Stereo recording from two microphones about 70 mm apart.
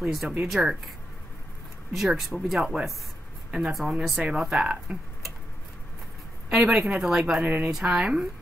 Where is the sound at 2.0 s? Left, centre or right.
Centre.